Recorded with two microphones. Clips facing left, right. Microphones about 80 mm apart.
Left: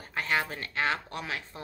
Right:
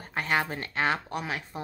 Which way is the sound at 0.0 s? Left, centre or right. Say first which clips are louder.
Right 2 dB; right.